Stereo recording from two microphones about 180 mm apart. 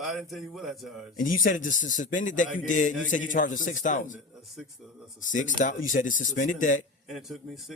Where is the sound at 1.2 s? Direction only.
50° left (ahead or behind).